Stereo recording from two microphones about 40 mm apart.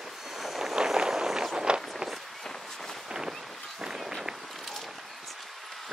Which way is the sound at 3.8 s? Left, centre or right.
Centre.